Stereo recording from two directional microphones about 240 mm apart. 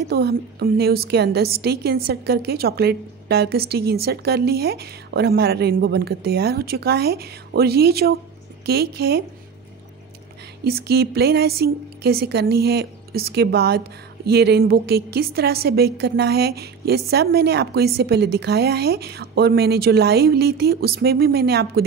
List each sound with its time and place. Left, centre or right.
0.1 s a woman's voice: right
10.6 s a woman's voice: right